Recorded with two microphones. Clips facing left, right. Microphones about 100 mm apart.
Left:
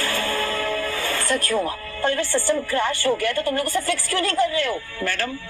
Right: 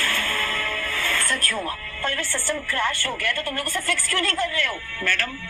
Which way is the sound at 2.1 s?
45° left (ahead or behind).